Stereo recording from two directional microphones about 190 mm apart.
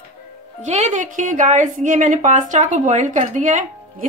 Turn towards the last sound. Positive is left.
turn(degrees=-40)  # may be behind; listen again after turning